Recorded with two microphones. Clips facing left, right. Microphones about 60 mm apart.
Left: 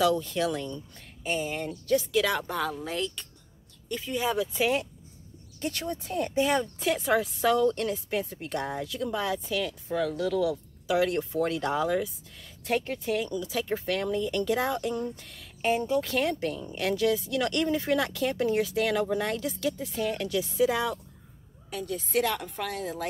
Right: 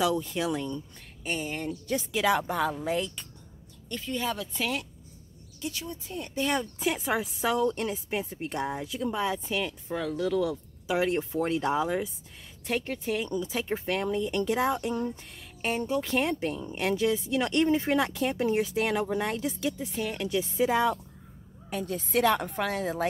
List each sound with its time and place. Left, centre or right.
0.0 s speech: centre
1.2 s speech: centre
1.5 s speech: centre
1.9 s a woman's voice: centre
3.9 s speech: centre
5.6 s speech: left
6.4 s speech: centre
6.8 s a woman's voice: centre; by 23.0 s right